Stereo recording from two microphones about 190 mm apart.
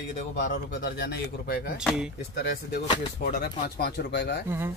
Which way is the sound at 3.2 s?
50° left (ahead or behind).